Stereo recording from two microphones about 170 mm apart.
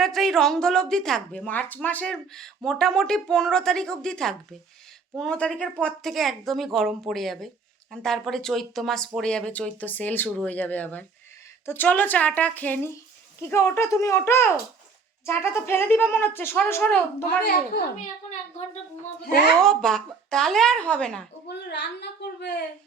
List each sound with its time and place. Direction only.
0.0 s speech: centre (ahead or behind)
19.6 s speech: 5° left (ahead or behind)
21.4 s a woman's voice: 85° left